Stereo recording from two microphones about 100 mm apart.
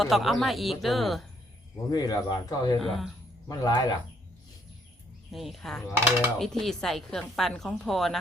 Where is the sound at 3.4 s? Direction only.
40° left (ahead or behind).